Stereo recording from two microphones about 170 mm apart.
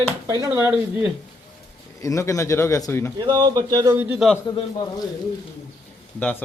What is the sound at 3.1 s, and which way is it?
Speech, 25° right (ahead or behind).